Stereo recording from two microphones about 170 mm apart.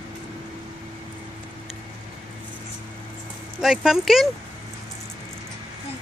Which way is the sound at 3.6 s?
5° right (ahead or behind).